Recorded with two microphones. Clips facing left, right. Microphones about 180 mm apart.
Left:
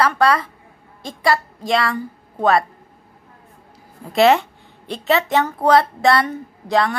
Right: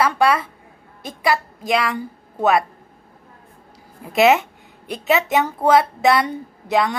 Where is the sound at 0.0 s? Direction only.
10° right (ahead or behind).